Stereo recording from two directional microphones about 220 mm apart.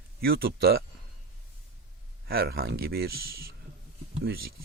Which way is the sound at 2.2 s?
45° right (ahead or behind).